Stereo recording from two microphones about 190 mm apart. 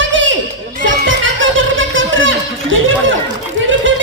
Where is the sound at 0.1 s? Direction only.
80° right.